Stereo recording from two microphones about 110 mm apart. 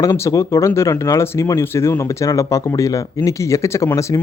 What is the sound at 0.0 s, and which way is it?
Speech, 30° left (ahead or behind).